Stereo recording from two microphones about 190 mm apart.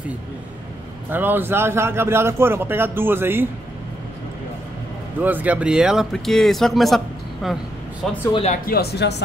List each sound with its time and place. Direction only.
1.1 s a man's voice: 10° right (ahead or behind)
5.2 s speech: 10° right (ahead or behind)
8.3 s speech: 30° left (ahead or behind)
8.6 s speech: 55° left (ahead or behind)